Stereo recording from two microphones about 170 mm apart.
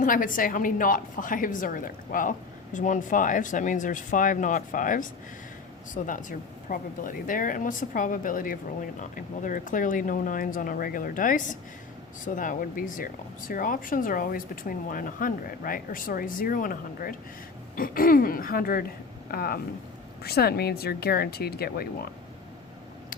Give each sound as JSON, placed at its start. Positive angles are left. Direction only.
{"t": 0.0, "sound": "speech", "side_deg": 50}